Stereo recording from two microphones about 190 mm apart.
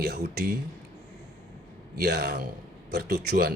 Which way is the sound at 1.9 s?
55° right (ahead or behind).